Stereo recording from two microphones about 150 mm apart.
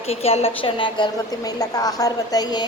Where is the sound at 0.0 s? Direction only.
40° left (ahead or behind).